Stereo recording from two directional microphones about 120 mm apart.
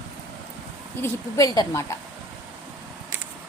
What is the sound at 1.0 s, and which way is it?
A woman's voice, 25° left (ahead or behind).